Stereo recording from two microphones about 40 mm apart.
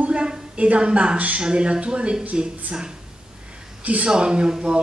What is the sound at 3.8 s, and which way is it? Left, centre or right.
Speech, right.